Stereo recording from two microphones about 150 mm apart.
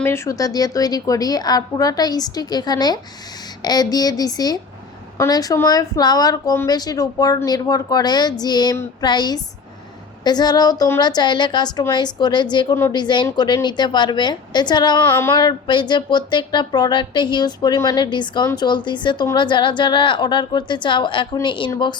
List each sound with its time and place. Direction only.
0.0 s speech: 20° left (ahead or behind)
15.1 s a sound: 15° left (ahead or behind)
15.4 s speech: 30° left (ahead or behind)